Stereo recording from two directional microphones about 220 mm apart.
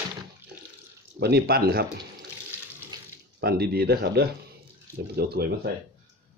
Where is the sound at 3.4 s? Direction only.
45° right (ahead or behind).